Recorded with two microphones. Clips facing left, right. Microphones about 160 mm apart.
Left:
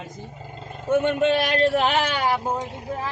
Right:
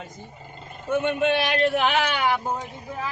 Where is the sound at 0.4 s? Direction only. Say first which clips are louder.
Left 4 dB; 90° left.